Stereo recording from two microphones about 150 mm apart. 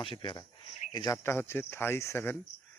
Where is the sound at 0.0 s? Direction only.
35° left (ahead or behind); by 2.4 s 15° left (ahead or behind).